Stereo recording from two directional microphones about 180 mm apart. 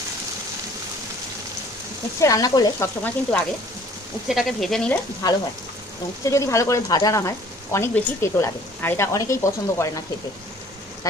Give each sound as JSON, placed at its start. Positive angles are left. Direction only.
{"t": 2.2, "sound": "speech", "side_deg": 20}
{"t": 4.3, "sound": "speech", "side_deg": 0}
{"t": 6.2, "sound": "speech", "side_deg": 15}
{"t": 11.1, "sound": "speech", "side_deg": 20}